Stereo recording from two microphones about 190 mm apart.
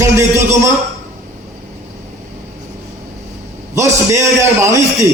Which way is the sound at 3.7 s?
15° right (ahead or behind).